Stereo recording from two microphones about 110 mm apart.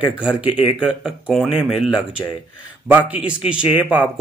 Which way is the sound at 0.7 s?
10° right (ahead or behind).